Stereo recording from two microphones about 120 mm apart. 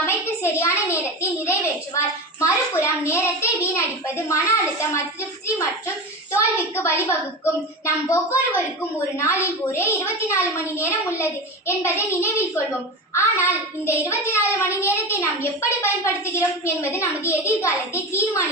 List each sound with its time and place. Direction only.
0.0 s a sound: 20° left (ahead or behind)
2.4 s a child's voice: 25° left (ahead or behind)
6.3 s a child's voice: 20° left (ahead or behind)